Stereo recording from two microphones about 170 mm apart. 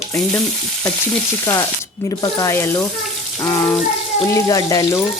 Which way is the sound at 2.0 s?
20° left (ahead or behind).